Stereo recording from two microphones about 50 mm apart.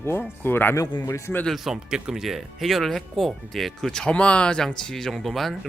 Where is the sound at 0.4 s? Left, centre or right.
Left.